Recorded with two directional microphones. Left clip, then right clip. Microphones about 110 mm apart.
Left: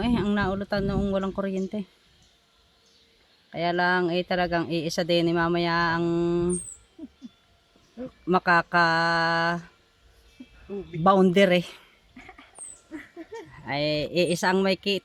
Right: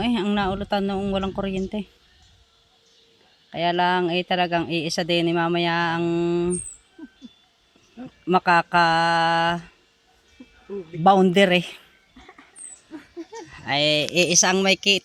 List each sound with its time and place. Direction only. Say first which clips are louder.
0.0 s speech: right 3 dB; 10° right (ahead or behind)
3.5 s speech: right 3 dB; 10° right (ahead or behind)
8.3 s speech: right 3 dB; 5° right (ahead or behind)
11.0 s speech: right 3 dB; 10° right (ahead or behind)
13.5 s speech: right 6 dB; centre (ahead or behind)